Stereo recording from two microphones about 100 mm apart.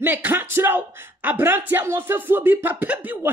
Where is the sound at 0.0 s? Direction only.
20° right (ahead or behind).